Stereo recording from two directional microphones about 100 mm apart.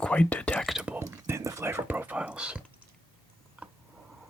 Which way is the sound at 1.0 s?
30° right (ahead or behind).